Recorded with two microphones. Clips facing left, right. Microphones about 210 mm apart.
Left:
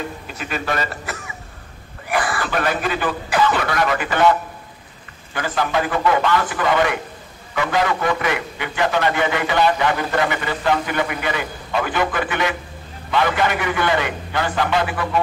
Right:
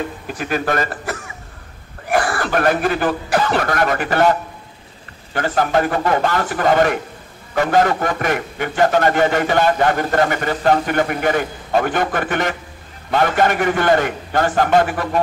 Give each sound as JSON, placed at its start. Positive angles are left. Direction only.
{"t": 0.3, "sound": "a man's voice", "side_deg": -50}